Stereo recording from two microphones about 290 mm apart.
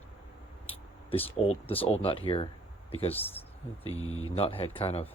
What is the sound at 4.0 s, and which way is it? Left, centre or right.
Speech, left.